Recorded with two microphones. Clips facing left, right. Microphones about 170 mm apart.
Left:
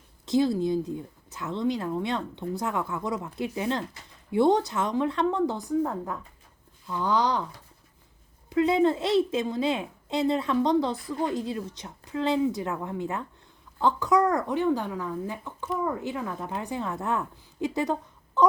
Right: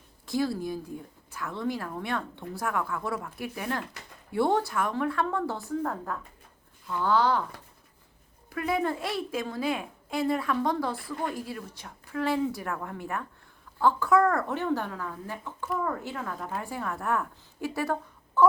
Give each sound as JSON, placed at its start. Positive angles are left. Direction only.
{"t": 0.3, "sound": "a woman's voice", "side_deg": 20}
{"t": 8.4, "sound": "a woman's voice", "side_deg": 20}